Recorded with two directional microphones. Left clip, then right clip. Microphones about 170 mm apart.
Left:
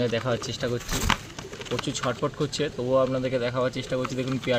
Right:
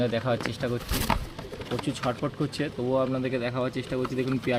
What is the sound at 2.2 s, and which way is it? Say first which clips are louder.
Speech: left 3 dB; 30° left (ahead or behind).